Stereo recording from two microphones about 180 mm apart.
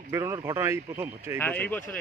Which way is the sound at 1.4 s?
10° left (ahead or behind).